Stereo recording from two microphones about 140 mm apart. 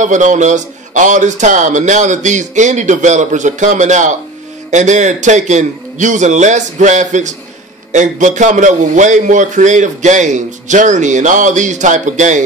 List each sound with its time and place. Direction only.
0.0 s a man's voice: 60° right (ahead or behind)